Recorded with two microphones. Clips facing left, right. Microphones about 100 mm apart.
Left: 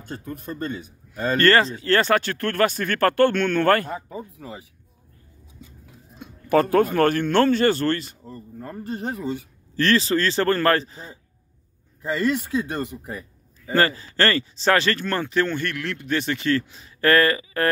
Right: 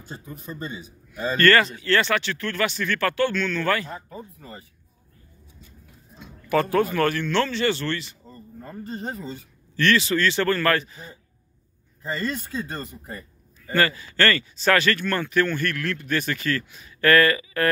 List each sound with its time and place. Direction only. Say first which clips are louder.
0.2 s speech: left 5 dB; 55° left (ahead or behind)
1.4 s speech: even; 30° left (ahead or behind); by 3.9 s 55° left (ahead or behind)
3.9 s speech: left 5 dB; 15° left (ahead or behind)
6.5 s speech: left 3 dB; 40° left (ahead or behind)
8.3 s a sound: left 4 dB; centre (ahead or behind)
9.2 s speech: left 7 dB; 75° left (ahead or behind)
9.8 s a man's voice: left 1 dB; 35° left (ahead or behind)
12.5 s speech: left 6 dB; 10° left (ahead or behind)
12.8 s speech: left 5 dB; 85° left
13.7 s speech: left 2 dB; 35° left (ahead or behind)